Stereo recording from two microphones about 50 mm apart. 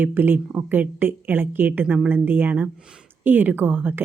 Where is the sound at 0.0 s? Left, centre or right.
Right.